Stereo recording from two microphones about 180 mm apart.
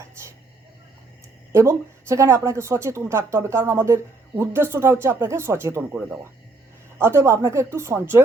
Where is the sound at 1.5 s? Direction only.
15° right (ahead or behind).